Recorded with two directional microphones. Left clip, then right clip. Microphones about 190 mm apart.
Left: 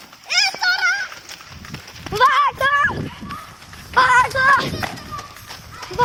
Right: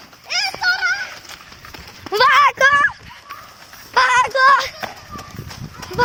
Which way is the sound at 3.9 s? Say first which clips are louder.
Even; 60° right (ahead or behind).